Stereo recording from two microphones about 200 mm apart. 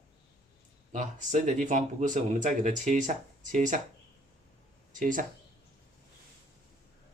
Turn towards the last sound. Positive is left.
turn(degrees=-40)  # may be behind; listen again after turning